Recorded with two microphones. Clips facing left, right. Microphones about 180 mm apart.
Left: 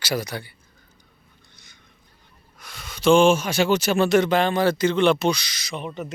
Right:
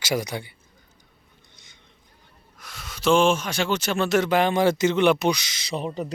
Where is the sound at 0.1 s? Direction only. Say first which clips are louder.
Right 1 dB; 15° right (ahead or behind).